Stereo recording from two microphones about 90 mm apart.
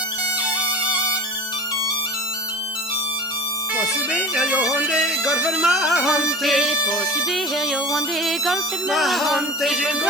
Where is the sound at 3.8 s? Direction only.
5° right (ahead or behind).